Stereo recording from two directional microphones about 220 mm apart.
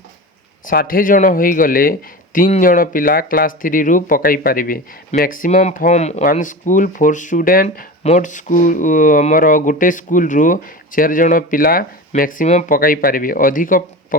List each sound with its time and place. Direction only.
0.6 s speech: 40° left (ahead or behind)